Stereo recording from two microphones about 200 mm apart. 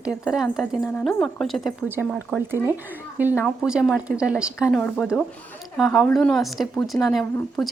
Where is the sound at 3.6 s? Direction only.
5° right (ahead or behind).